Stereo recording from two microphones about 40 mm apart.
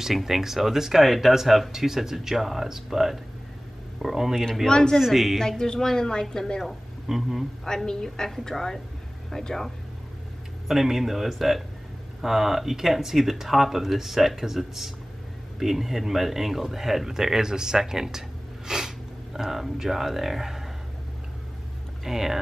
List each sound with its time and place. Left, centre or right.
0.0 s speech: centre
4.6 s a woman's voice: centre
4.9 s speech: centre
5.4 s a woman's voice: centre
6.6 s speech: centre
7.6 s a woman's voice: centre
10.7 s speech: centre
22.0 s speech: centre